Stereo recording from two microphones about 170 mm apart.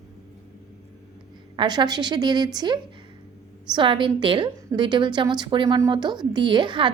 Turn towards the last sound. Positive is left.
turn(degrees=-30)  # may be behind; listen again after turning